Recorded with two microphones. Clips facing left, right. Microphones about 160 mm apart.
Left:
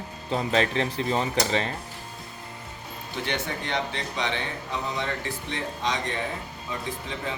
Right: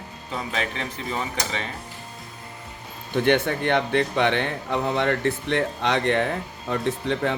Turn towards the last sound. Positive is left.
turn(degrees=-60)  # may be behind; listen again after turning